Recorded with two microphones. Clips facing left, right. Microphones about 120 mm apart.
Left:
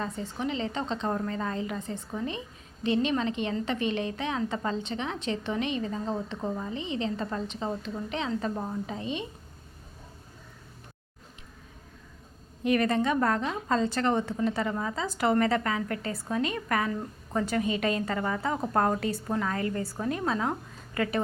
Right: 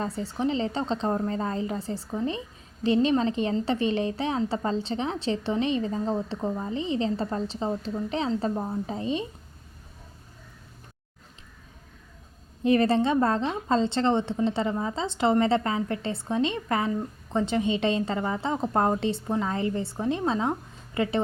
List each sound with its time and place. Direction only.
0.0 s a woman's voice: 35° right (ahead or behind)
12.6 s a woman's voice: 30° right (ahead or behind)